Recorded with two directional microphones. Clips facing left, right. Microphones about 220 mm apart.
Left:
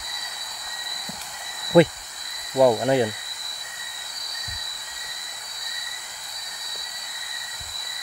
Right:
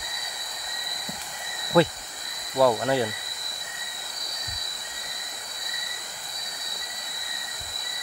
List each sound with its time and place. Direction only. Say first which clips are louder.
1.7 s cricket: left 5 dB; 20° left (ahead or behind)
2.5 s speech: left 4 dB; 20° left (ahead or behind)